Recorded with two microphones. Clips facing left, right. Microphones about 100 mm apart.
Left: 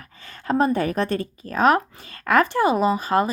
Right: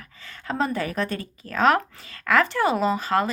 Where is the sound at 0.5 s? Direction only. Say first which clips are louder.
Left 5 dB; 20° left (ahead or behind).